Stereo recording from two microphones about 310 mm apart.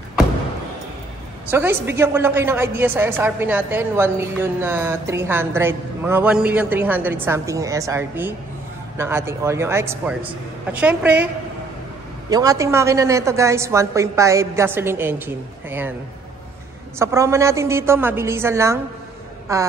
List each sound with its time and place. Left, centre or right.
1.5 s a woman's voice: centre
12.3 s a woman's voice: centre
17.0 s a woman's voice: centre